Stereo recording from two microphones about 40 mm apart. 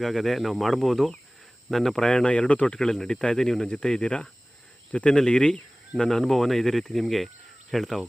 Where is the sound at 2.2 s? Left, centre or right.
Left.